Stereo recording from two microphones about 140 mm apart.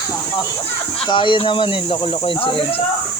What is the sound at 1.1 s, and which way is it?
Speech, 35° left (ahead or behind).